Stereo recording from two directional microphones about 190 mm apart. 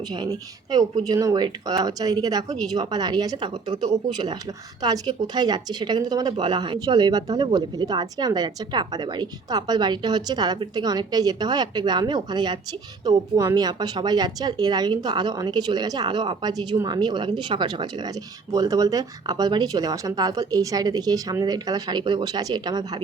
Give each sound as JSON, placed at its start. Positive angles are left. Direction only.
{"t": 0.1, "sound": "speech", "side_deg": -20}